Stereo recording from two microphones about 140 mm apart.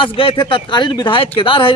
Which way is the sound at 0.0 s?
40° left (ahead or behind).